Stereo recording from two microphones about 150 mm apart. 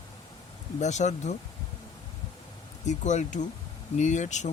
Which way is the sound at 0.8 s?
50° left (ahead or behind).